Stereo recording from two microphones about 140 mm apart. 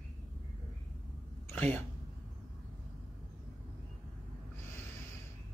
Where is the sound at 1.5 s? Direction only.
15° left (ahead or behind).